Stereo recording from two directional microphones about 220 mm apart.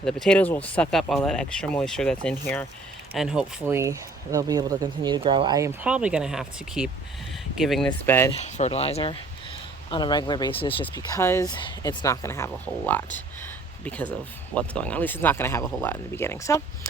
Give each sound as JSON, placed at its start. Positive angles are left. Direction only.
{"t": 0.0, "sound": "speech", "side_deg": 5}
{"t": 8.3, "sound": "speech", "side_deg": 30}
{"t": 11.2, "sound": "speech", "side_deg": 10}